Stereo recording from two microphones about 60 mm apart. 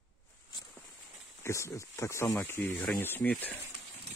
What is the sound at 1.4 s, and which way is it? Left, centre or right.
Speech, left.